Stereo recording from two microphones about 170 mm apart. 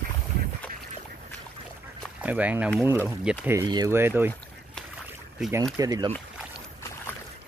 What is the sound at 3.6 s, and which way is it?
Speech, 25° right (ahead or behind).